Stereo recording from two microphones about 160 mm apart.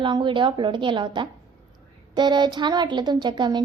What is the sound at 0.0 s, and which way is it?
A woman's voice, 30° right (ahead or behind).